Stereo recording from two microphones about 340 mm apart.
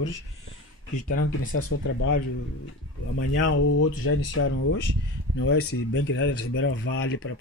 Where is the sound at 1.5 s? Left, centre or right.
Left.